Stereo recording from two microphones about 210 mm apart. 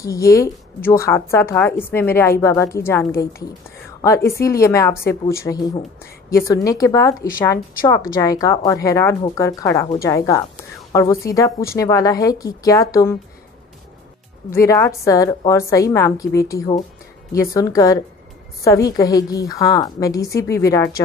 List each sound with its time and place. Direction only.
0.0 s a woman's voice: 15° left (ahead or behind)
4.3 s a woman's voice: 15° left (ahead or behind)
14.5 s a woman's voice: 15° left (ahead or behind)